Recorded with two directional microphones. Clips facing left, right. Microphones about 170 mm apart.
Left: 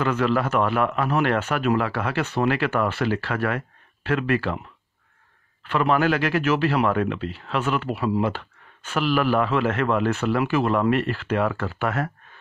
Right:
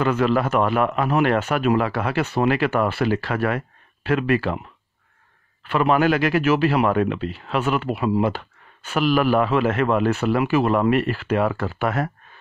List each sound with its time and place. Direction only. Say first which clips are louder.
0.0 s speech: right 2 dB; 15° right (ahead or behind)
5.7 s speech: right 2 dB; 15° right (ahead or behind)